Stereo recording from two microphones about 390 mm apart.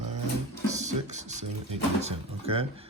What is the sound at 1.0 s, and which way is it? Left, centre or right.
Speech, centre.